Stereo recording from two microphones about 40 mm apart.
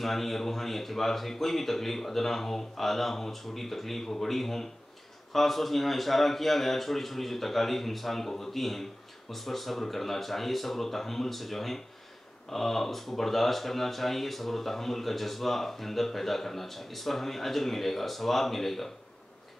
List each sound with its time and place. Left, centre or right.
0.0 s speech: centre